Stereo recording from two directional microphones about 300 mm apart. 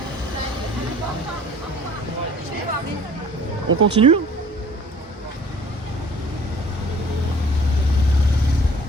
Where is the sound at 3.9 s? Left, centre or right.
Centre.